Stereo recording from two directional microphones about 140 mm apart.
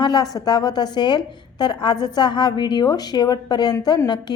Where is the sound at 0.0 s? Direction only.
30° left (ahead or behind).